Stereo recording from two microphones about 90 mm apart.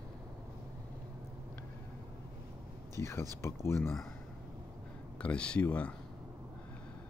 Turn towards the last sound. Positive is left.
turn(degrees=15)  # may be behind; listen again after turning